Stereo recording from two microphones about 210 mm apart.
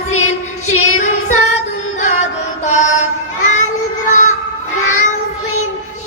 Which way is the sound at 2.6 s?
35° left (ahead or behind).